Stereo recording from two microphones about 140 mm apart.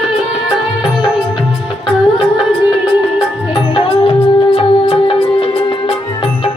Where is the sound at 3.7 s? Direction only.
40° left (ahead or behind).